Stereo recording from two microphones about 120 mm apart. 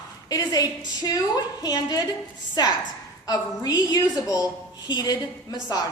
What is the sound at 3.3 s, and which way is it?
A woman's voice, 35° left (ahead or behind).